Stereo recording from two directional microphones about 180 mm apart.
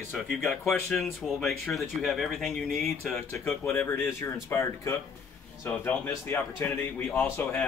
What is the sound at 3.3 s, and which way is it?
Speech, 15° left (ahead or behind).